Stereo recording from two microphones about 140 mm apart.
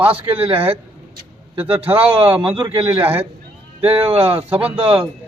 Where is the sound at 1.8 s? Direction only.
10° right (ahead or behind).